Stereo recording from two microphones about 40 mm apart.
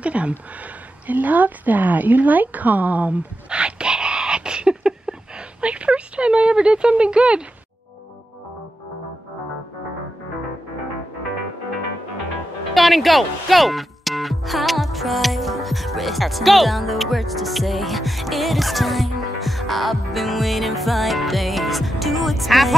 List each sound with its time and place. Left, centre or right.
0.0 s speech: right
1.0 s a woman's voice: right
3.4 s a sound: right
5.6 s speech: right
12.7 s speech: centre